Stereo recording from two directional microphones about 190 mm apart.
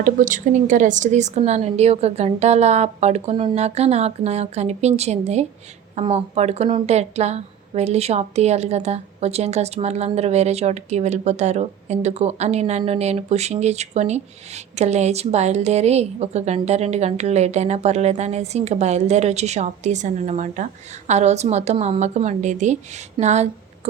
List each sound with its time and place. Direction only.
0.0 s speech: 45° right (ahead or behind)